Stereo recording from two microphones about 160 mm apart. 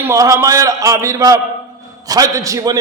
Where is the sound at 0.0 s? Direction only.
20° right (ahead or behind).